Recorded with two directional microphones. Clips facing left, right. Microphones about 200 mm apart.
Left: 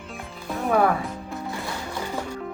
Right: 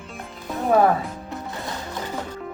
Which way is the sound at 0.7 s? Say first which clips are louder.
Right 3 dB; 35° right (ahead or behind).